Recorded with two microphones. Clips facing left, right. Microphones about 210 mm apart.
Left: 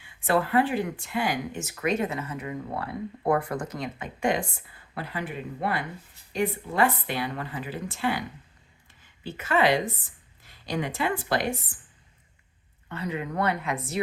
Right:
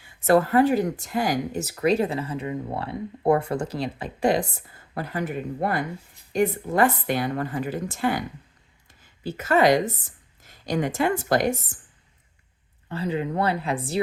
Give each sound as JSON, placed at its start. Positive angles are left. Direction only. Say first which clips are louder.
{"t": 0.0, "sound": "a woman's voice", "louder": "right 6 dB", "side_deg": -40}
{"t": 12.9, "sound": "speech", "louder": "right 5 dB", "side_deg": -30}